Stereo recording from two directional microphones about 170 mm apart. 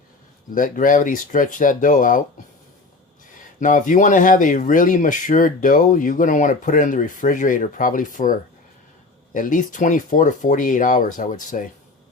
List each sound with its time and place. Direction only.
0.5 s speech: 55° left (ahead or behind)
3.6 s speech: 50° left (ahead or behind)